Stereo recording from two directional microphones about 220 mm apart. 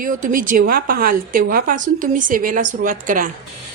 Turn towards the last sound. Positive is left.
turn(degrees=-35)  # may be behind; listen again after turning